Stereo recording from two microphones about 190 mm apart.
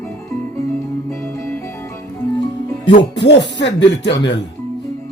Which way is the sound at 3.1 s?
65° left (ahead or behind).